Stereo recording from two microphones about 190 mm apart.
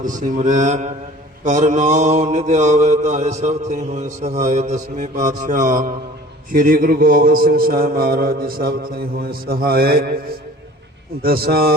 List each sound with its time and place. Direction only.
0.0 s mantra: 40° right (ahead or behind)
11.2 s mantra: 55° right (ahead or behind)